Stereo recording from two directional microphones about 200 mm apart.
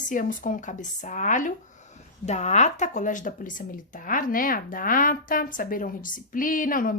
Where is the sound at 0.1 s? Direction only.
40° left (ahead or behind).